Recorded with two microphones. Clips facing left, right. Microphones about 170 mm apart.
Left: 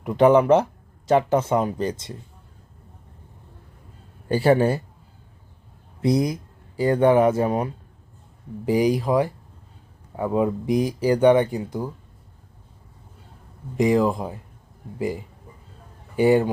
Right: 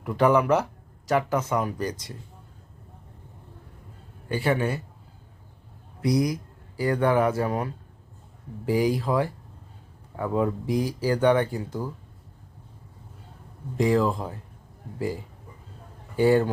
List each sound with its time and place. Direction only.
0.0 s speech: 20° left (ahead or behind)
4.3 s a man's voice: 35° left (ahead or behind)
6.0 s speech: 25° left (ahead or behind)
13.7 s speech: 15° left (ahead or behind)